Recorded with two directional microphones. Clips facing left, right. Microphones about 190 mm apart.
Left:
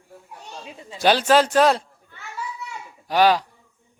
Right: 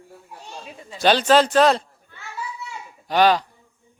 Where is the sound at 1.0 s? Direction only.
10° left (ahead or behind).